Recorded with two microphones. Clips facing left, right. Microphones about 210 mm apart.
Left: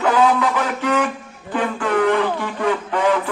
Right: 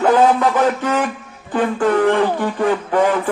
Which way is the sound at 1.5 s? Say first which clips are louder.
Right 4 dB; 45° right (ahead or behind).